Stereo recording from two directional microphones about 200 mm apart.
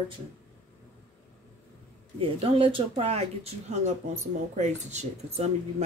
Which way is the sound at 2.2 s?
25° right (ahead or behind).